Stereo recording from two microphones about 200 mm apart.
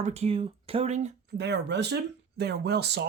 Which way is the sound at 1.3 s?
60° right (ahead or behind).